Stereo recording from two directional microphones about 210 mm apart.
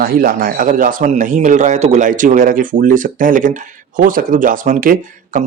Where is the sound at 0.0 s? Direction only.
45° right (ahead or behind).